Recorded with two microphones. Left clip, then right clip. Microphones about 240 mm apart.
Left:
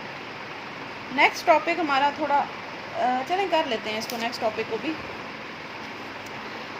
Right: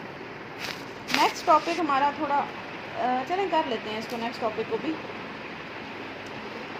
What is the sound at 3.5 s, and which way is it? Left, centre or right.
A woman's voice, left.